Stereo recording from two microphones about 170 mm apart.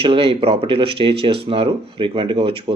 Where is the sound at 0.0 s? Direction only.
35° right (ahead or behind).